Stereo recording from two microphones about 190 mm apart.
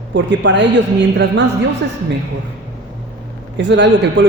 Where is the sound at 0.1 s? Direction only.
70° right (ahead or behind).